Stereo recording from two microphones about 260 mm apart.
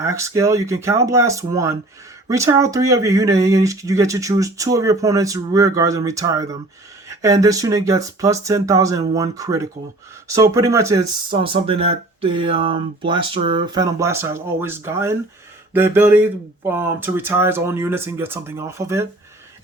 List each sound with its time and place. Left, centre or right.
0.0 s speech: centre